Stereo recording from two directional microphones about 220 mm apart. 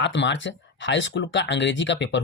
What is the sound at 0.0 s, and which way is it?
Speech, 55° left (ahead or behind).